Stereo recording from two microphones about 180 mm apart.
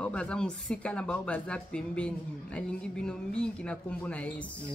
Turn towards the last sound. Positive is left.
turn(degrees=5)  # may be behind; listen again after turning